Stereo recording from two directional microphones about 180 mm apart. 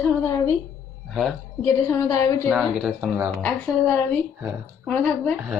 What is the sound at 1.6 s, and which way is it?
Speech, 15° left (ahead or behind).